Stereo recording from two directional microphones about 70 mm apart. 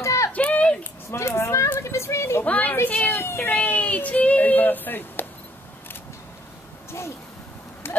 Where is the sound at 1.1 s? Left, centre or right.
Left.